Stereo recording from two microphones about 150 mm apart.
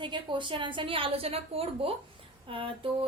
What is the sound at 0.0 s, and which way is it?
A woman's voice, 30° right (ahead or behind).